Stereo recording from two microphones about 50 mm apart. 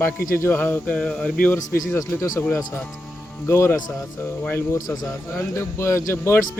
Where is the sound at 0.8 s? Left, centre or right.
Left.